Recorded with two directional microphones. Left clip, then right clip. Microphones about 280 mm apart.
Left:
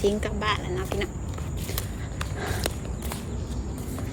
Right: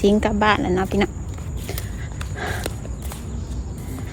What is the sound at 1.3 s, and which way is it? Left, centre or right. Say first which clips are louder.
Walk: right 2 dB; centre.